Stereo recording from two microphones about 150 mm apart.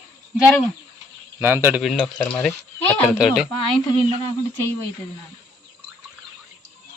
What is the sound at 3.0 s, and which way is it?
Speech, 5° right (ahead or behind).